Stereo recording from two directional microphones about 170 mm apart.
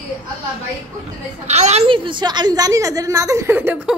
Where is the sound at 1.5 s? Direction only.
40° right (ahead or behind).